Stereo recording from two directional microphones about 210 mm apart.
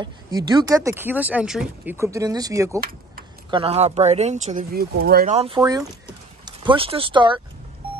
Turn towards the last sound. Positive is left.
turn(degrees=-20)  # may be behind; listen again after turning